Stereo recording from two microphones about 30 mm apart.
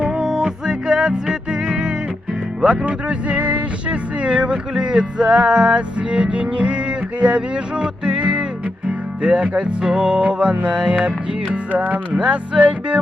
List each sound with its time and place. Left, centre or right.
0.0 s music: centre
2.8 s speech: right
4.7 s music: right
10.6 s music: right
11.7 s music: right
12.2 s speech: right